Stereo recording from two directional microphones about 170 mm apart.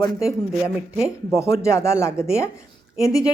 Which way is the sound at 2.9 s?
5° right (ahead or behind).